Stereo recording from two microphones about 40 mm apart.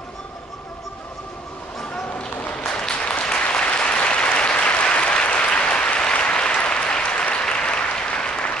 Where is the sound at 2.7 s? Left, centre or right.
Left.